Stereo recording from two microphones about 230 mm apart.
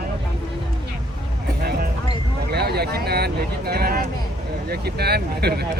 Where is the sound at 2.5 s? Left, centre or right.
Right.